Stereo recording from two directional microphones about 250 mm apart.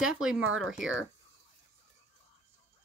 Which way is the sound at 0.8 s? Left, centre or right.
Right.